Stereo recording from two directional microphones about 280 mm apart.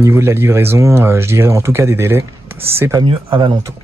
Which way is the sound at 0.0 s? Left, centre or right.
Centre.